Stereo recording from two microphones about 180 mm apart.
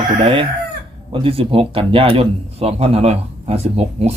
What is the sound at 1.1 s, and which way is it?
Speech, 30° right (ahead or behind).